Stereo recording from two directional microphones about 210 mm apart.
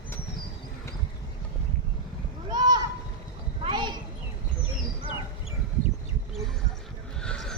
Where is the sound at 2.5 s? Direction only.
20° right (ahead or behind).